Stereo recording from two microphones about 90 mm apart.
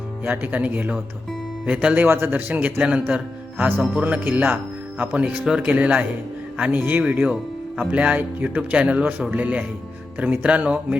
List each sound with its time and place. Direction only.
0.3 s speech: 20° right (ahead or behind)
2.7 s speech: 10° right (ahead or behind)
3.6 s speech: 20° right (ahead or behind)